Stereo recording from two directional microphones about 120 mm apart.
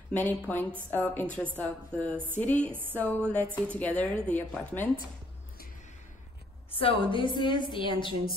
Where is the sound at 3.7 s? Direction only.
10° left (ahead or behind).